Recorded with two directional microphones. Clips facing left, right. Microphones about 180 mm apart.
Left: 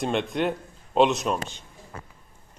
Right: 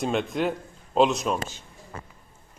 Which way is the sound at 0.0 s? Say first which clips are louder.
Even; centre (ahead or behind).